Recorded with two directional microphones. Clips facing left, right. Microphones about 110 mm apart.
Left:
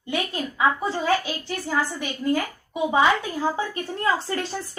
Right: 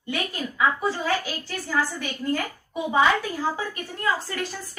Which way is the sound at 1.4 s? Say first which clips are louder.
Left 1 dB; 15° left (ahead or behind).